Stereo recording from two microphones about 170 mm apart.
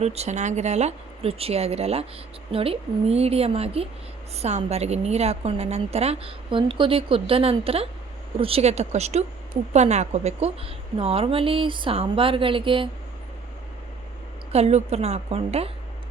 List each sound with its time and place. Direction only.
0.0 s a woman's voice: 40° right (ahead or behind)
14.5 s a woman's voice: 40° right (ahead or behind)